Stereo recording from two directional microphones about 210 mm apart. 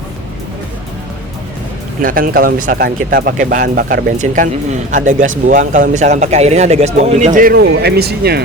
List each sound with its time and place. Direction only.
2.0 s speech: 40° right (ahead or behind)
7.3 s speech: 45° right (ahead or behind)